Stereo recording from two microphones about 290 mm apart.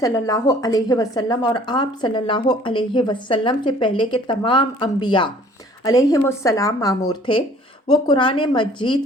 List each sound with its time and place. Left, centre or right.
0.0 s a woman's voice: centre